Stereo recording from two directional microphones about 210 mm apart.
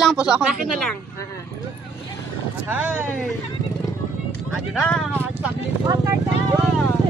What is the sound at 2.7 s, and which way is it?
Speech, 10° right (ahead or behind).